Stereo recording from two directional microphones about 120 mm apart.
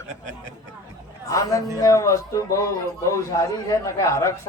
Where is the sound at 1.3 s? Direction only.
25° left (ahead or behind).